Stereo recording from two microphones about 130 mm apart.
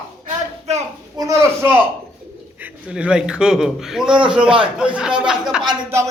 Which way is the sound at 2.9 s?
5° right (ahead or behind).